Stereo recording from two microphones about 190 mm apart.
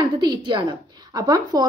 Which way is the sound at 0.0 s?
25° right (ahead or behind).